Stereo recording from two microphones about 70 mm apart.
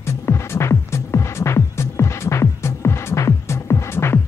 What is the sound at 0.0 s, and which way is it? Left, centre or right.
Music, left.